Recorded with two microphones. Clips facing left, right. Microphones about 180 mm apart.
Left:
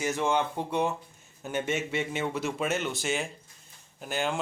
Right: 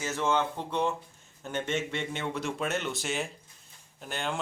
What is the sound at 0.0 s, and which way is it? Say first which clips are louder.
Speech: left 1 dB; 15° left (ahead or behind).